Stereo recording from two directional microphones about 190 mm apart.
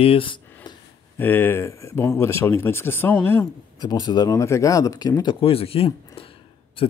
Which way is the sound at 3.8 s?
20° left (ahead or behind).